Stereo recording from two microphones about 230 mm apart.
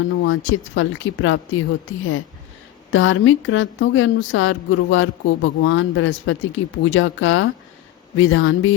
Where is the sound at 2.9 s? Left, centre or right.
Left.